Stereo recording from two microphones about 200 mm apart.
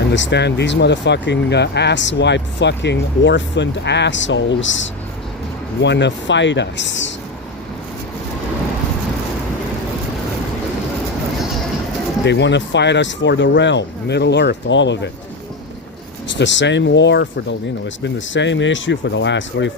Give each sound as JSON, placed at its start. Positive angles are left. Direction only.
{"t": 0.1, "sound": "speech", "side_deg": 60}
{"t": 12.2, "sound": "speech", "side_deg": 60}
{"t": 16.4, "sound": "speech", "side_deg": 65}